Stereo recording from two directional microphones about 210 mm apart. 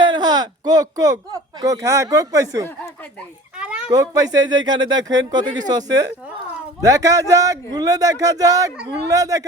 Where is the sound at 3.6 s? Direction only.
5° right (ahead or behind).